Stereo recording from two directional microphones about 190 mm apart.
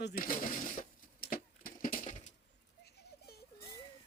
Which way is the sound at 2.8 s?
55° left (ahead or behind).